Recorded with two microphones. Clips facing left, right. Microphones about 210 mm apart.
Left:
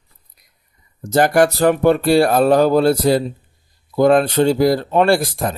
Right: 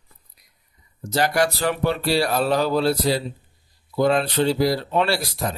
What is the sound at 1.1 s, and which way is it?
Speech, 50° left (ahead or behind).